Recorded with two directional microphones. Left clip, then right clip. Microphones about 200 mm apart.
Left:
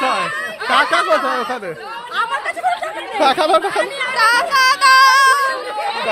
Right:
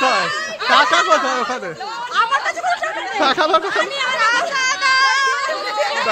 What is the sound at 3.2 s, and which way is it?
Speech, 5° left (ahead or behind).